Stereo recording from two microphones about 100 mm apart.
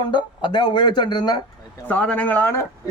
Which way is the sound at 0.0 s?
50° left (ahead or behind).